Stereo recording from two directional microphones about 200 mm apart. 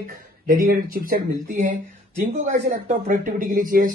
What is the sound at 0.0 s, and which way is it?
Speech, 45° right (ahead or behind).